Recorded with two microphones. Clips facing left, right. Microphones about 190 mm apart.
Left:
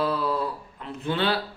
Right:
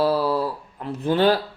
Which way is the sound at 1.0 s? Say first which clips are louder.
Right 7 dB; 40° right (ahead or behind).